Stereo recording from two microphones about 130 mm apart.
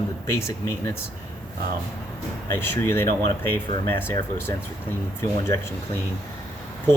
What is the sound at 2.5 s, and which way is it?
Speech, 20° left (ahead or behind).